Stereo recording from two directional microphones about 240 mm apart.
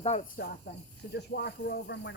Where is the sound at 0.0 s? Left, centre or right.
Left.